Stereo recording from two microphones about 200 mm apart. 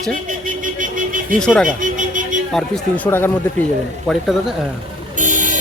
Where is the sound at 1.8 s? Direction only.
40° right (ahead or behind).